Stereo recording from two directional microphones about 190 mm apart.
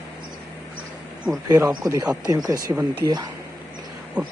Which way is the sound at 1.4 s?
20° right (ahead or behind).